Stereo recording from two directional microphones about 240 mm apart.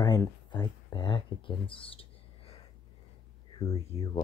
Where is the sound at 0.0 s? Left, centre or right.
Centre.